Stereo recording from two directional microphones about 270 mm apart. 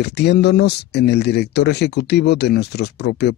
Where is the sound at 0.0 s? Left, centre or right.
Left.